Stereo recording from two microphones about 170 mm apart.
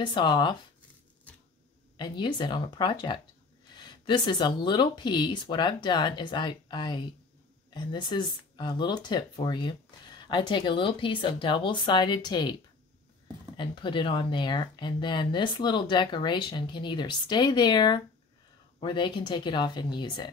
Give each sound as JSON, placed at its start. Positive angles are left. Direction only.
{"t": 0.0, "sound": "speech", "side_deg": 25}
{"t": 2.0, "sound": "speech", "side_deg": 25}
{"t": 13.6, "sound": "speech", "side_deg": 30}